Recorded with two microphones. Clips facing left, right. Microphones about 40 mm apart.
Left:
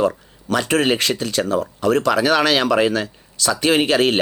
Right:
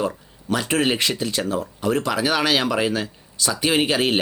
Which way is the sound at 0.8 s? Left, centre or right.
Left.